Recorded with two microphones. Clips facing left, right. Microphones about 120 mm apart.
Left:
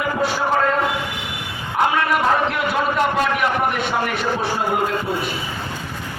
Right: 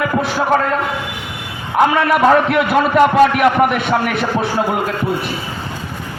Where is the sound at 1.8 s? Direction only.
75° right (ahead or behind).